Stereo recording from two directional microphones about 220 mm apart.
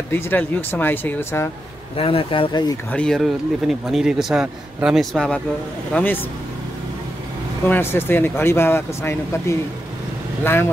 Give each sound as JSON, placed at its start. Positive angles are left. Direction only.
{"t": 0.1, "sound": "speech", "side_deg": 10}
{"t": 2.0, "sound": "speech", "side_deg": 25}
{"t": 2.9, "sound": "speech", "side_deg": 5}
{"t": 7.6, "sound": "speech", "side_deg": 10}